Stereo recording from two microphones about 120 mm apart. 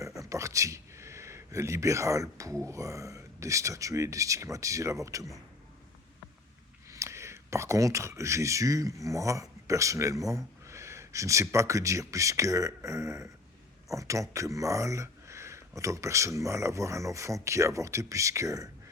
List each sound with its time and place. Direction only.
0.0 s a sound: 25° right (ahead or behind)
2.6 s speech: 25° right (ahead or behind)
6.9 s speech: 25° right (ahead or behind)